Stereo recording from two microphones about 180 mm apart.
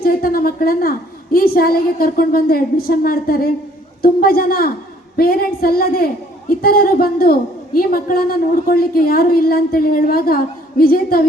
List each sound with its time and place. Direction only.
0.0 s a woman's voice: 55° left (ahead or behind)